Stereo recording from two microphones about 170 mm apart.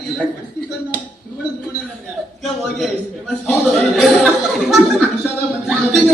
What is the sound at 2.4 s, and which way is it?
Chuckle, centre (ahead or behind).